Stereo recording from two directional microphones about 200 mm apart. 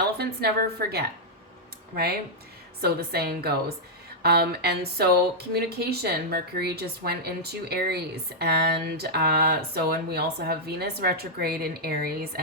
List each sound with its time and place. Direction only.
0.2 s speech: 50° right (ahead or behind)
2.8 s speech: 50° right (ahead or behind)